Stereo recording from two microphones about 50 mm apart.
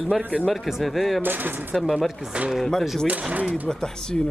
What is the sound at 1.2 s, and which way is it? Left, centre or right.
Speech, right.